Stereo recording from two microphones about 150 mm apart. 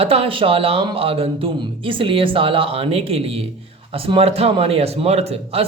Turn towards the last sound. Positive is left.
turn(degrees=-40)  # may be behind; listen again after turning